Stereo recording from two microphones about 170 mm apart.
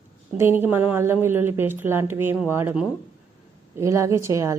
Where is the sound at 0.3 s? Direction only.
15° right (ahead or behind).